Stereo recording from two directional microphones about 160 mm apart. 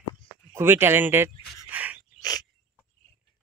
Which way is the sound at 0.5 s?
15° right (ahead or behind).